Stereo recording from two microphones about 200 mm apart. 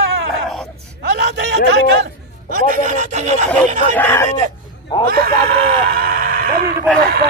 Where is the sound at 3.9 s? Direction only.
10° left (ahead or behind).